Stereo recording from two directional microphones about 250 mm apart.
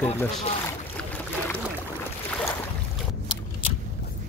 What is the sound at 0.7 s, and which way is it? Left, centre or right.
Boat, centre.